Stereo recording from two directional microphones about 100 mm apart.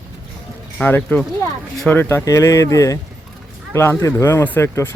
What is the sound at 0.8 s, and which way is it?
Speech, 15° left (ahead or behind).